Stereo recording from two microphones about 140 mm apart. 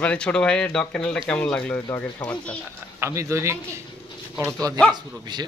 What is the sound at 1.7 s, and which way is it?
Speech, 20° left (ahead or behind).